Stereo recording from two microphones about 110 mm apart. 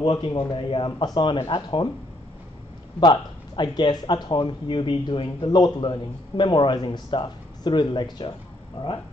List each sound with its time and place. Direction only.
0.0 s a man's voice: 50° left (ahead or behind)
3.0 s a man's voice: 40° left (ahead or behind)